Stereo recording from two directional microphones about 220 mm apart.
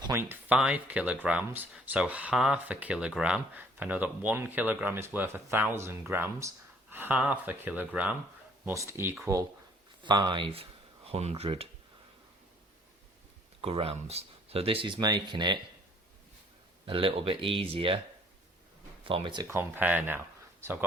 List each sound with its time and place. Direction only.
0.0 s speech: 10° right (ahead or behind)
10.0 s speech: 20° right (ahead or behind)
13.6 s speech: 25° right (ahead or behind)
16.8 s speech: 25° right (ahead or behind)
19.0 s speech: 25° right (ahead or behind)